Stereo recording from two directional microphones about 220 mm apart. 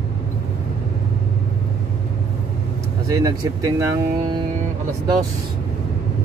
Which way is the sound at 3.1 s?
15° right (ahead or behind).